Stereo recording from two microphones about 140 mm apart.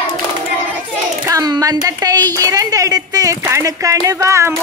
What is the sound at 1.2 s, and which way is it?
A woman's voice, 25° right (ahead or behind).